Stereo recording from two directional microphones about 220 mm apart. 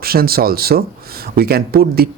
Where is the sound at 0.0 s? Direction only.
45° right (ahead or behind).